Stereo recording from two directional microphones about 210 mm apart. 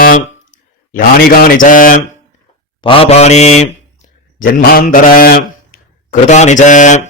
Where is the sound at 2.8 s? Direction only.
25° left (ahead or behind).